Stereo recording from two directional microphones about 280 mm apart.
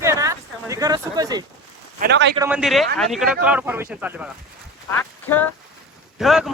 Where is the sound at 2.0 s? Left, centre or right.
Right.